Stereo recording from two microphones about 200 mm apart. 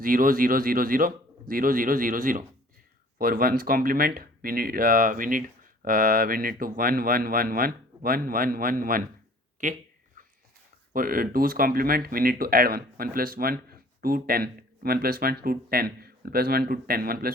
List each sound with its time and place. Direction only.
0.0 s speech: 45° right (ahead or behind)
10.2 s a sound: 40° right (ahead or behind)
10.9 s speech: 45° right (ahead or behind)